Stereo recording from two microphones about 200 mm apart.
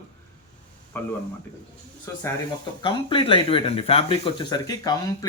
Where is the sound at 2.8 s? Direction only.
25° left (ahead or behind).